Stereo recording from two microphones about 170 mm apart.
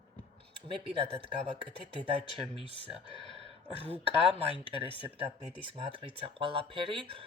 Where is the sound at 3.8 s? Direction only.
35° right (ahead or behind).